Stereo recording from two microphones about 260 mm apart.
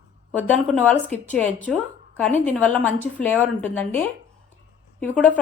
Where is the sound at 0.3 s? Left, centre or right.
Centre.